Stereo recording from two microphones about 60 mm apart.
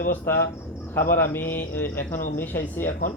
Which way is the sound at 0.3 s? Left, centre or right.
Left.